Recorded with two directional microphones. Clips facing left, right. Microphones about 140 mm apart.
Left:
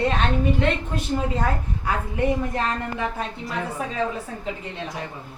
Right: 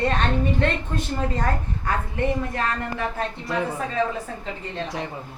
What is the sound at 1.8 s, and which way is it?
Speech, 15° left (ahead or behind).